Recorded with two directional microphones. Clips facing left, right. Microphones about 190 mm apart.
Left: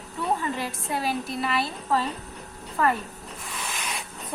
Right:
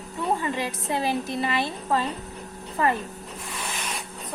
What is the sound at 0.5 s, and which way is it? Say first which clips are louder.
A woman's voice: right 2 dB; 20° right (ahead or behind).